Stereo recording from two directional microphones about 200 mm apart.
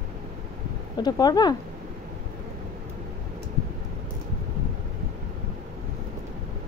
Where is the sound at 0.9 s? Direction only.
20° left (ahead or behind).